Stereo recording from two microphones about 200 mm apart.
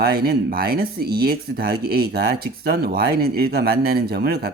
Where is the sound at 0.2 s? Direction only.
50° right (ahead or behind).